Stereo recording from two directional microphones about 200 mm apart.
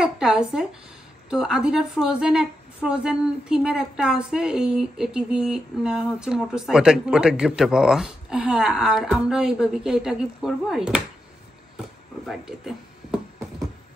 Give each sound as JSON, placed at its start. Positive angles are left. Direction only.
{"t": 0.0, "sound": "a woman's voice", "side_deg": -5}
{"t": 12.3, "sound": "speech", "side_deg": 0}